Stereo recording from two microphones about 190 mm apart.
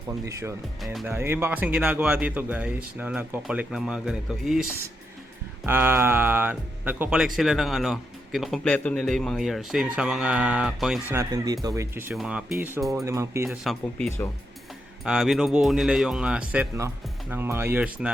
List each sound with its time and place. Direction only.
0.1 s speech: 15° right (ahead or behind)
11.1 s speech: 20° right (ahead or behind)
13.7 s speech: 5° left (ahead or behind)